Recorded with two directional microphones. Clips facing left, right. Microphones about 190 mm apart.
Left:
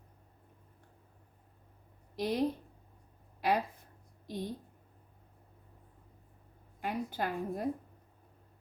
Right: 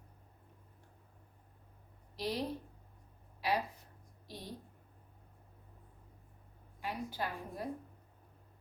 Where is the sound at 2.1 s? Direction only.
50° left (ahead or behind).